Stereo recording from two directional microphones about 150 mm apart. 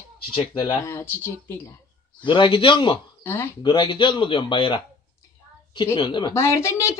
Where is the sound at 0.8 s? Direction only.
20° left (ahead or behind).